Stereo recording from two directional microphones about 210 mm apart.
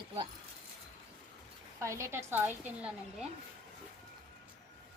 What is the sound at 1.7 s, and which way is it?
A woman's voice, 15° right (ahead or behind).